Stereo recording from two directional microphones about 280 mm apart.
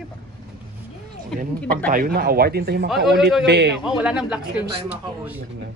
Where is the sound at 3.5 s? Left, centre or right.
Right.